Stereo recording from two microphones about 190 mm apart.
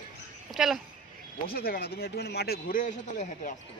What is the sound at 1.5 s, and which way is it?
A man's voice, 50° left (ahead or behind).